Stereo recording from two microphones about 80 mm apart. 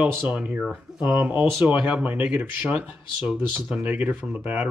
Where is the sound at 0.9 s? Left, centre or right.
Centre.